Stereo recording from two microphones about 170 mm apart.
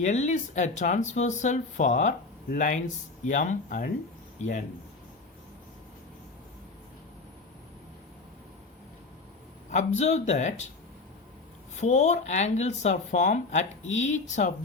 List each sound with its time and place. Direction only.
0.0 s speech: 45° left (ahead or behind)
9.6 s speech: 40° left (ahead or behind)
11.8 s speech: 45° left (ahead or behind)